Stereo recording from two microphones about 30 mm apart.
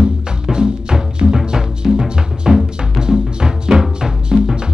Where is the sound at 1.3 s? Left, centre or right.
Centre.